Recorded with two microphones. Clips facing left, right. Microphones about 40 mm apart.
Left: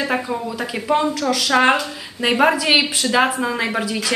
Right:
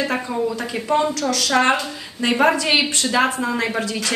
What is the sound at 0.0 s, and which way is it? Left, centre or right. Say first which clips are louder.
Speech: even; centre.